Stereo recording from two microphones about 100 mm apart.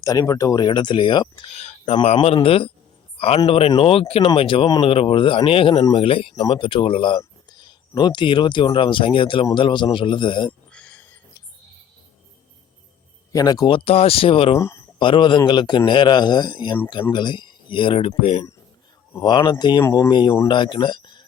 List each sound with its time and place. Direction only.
0.0 s speech: 35° left (ahead or behind)
2.2 s speech: 70° left (ahead or behind)
3.2 s speech: 85° left
3.8 s a man's voice: 70° left (ahead or behind)
7.5 s a man's voice: 45° left (ahead or behind)
10.7 s a sound: 10° left (ahead or behind)
13.3 s speech: 40° left (ahead or behind)
13.7 s speech: 65° left (ahead or behind)
14.6 s speech: 30° left (ahead or behind)
14.9 s speech: 55° left (ahead or behind)
18.2 s speech: 80° left
19.2 s speech: 50° left (ahead or behind)